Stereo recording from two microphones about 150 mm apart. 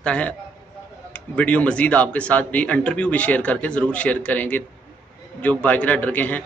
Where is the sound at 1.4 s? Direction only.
10° left (ahead or behind).